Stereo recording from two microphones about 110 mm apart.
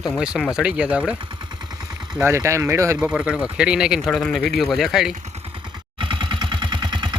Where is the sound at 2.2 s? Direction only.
25° right (ahead or behind).